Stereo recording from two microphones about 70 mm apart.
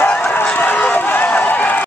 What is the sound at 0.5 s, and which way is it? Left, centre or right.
Run, left.